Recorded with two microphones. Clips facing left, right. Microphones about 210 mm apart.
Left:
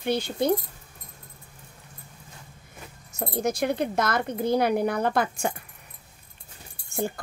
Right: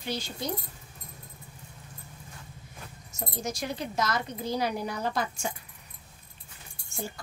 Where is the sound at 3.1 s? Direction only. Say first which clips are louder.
Left 8 dB; 55° left (ahead or behind).